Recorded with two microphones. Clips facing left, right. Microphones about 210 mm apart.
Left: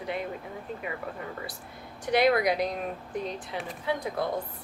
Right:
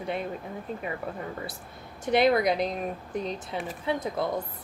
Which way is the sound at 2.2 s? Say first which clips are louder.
Right 1 dB; 25° right (ahead or behind).